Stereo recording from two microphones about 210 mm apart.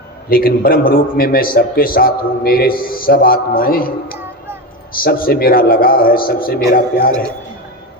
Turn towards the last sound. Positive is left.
turn(degrees=45)  # may be behind; listen again after turning